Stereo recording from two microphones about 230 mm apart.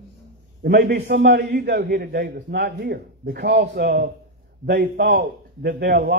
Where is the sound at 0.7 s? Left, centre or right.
Right.